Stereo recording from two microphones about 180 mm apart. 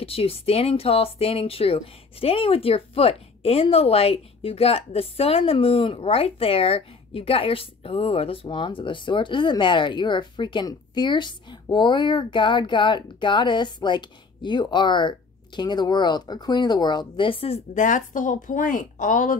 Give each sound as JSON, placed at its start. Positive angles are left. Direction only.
{"t": 0.0, "sound": "speech", "side_deg": 35}